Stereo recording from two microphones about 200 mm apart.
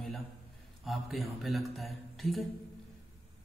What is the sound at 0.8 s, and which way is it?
Speech, centre (ahead or behind).